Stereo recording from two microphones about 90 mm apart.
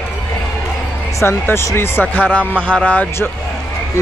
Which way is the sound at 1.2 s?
30° left (ahead or behind).